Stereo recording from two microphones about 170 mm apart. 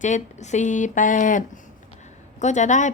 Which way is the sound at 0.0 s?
45° left (ahead or behind).